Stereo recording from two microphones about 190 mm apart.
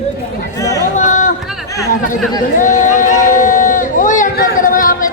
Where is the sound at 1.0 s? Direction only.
40° left (ahead or behind).